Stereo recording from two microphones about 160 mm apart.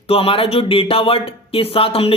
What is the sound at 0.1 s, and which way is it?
Speech, 35° left (ahead or behind).